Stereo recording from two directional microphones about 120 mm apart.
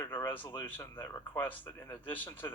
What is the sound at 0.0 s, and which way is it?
Speech, 20° left (ahead or behind).